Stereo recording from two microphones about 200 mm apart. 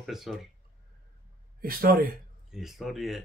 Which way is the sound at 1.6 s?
45° right (ahead or behind).